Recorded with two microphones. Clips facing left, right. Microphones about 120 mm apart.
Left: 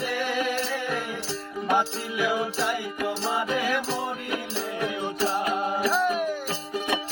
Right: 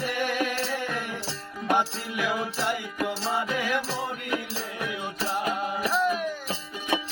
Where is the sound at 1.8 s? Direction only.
20° left (ahead or behind).